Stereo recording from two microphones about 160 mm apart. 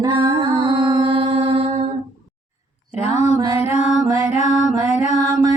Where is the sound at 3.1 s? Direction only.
45° left (ahead or behind).